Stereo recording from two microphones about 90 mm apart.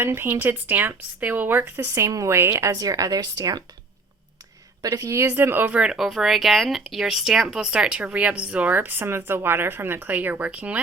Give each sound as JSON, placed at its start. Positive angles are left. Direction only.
{"t": 0.0, "sound": "a woman's voice", "side_deg": -25}
{"t": 4.8, "sound": "a woman's voice", "side_deg": -40}
{"t": 5.3, "sound": "speech", "side_deg": -20}